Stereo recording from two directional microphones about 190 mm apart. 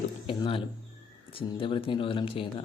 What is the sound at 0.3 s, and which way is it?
Speech, 30° left (ahead or behind).